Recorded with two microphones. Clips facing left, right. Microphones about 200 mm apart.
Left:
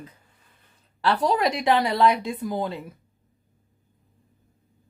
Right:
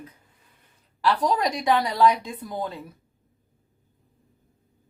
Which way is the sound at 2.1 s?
10° left (ahead or behind).